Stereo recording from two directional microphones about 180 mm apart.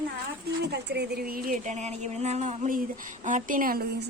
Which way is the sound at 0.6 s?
65° right (ahead or behind).